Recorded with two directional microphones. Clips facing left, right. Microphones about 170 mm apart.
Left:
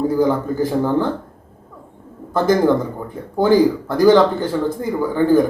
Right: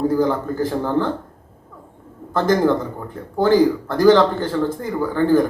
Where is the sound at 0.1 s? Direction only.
10° left (ahead or behind).